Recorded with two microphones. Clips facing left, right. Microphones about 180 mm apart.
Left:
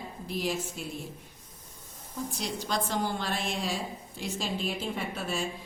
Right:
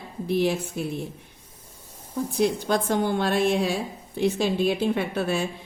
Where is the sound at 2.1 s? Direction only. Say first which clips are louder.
Right 11 dB; 55° right (ahead or behind).